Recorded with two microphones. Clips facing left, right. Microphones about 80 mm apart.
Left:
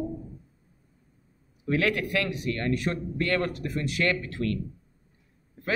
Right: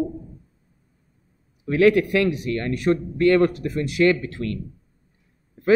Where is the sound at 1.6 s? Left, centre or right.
Centre.